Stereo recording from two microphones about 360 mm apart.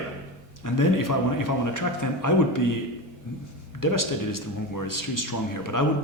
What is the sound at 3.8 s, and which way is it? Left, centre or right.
A man's voice, left.